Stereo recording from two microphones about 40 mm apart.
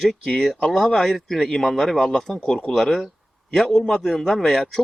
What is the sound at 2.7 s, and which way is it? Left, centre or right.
Speech, centre.